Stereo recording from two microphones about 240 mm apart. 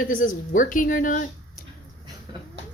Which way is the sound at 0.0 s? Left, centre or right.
Left.